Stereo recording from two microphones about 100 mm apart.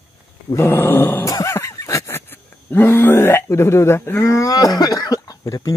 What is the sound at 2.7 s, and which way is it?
Speech, 20° left (ahead or behind).